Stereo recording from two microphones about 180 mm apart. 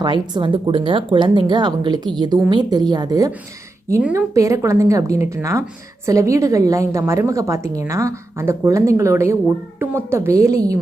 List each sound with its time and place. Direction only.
0.0 s a woman's voice: 25° right (ahead or behind)